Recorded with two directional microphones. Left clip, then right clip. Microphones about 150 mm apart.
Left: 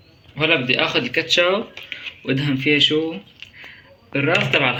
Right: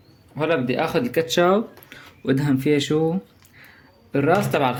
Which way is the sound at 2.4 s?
65° right (ahead or behind).